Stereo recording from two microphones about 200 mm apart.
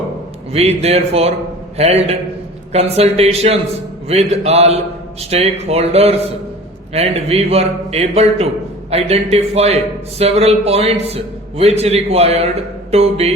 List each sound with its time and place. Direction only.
0.5 s a man's voice: 30° right (ahead or behind)